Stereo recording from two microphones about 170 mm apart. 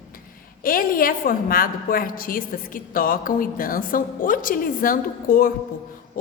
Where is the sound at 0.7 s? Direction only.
55° left (ahead or behind).